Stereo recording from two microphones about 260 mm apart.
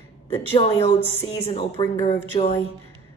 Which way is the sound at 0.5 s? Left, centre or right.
Left.